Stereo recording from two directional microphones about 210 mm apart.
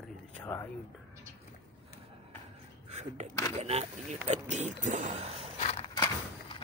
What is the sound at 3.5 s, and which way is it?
Speech, 30° right (ahead or behind).